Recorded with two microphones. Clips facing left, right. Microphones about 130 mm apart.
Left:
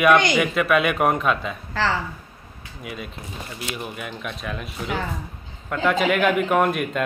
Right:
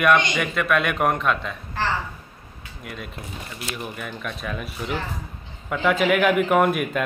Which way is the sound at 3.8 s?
5° left (ahead or behind).